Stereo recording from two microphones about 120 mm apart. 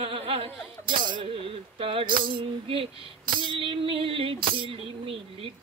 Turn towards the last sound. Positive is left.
turn(degrees=-45)  # may be behind; listen again after turning